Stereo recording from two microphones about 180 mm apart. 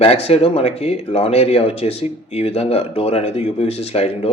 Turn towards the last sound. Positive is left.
turn(degrees=35)  # may be behind; listen again after turning